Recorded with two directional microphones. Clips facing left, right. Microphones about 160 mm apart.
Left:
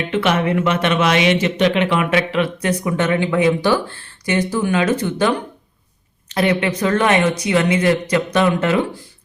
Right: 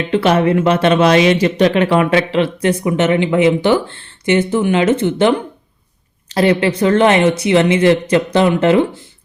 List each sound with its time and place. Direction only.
0.1 s speech: 35° right (ahead or behind)